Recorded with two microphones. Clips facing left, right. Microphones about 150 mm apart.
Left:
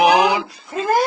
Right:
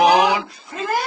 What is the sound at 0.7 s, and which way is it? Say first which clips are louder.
Speech: left 5 dB; 40° left (ahead or behind).